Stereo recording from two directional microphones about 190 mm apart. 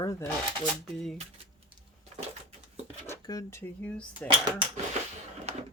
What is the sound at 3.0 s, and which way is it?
Speech, 15° left (ahead or behind).